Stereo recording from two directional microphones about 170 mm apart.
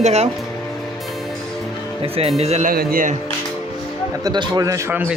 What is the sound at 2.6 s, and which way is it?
Speech, 55° right (ahead or behind).